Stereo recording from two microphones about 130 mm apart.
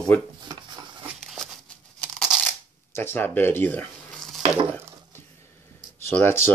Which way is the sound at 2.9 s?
15° left (ahead or behind).